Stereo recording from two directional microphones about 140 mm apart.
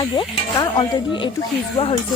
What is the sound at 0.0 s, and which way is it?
Speech, 30° left (ahead or behind).